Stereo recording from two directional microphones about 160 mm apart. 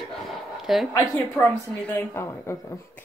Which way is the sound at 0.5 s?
Centre (ahead or behind).